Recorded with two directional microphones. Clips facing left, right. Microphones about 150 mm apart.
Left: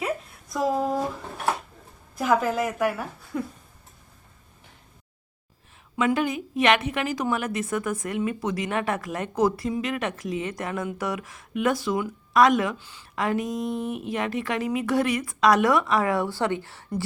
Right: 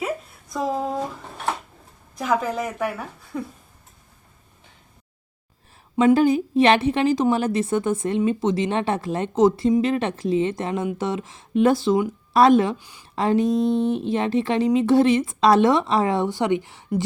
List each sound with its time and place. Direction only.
2.1 s a woman's voice: 5° left (ahead or behind)
6.1 s a woman's voice: 35° right (ahead or behind)
12.8 s a woman's voice: 15° right (ahead or behind)
13.1 s a woman's voice: 30° right (ahead or behind)